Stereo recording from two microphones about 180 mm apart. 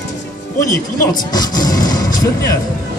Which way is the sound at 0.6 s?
20° left (ahead or behind).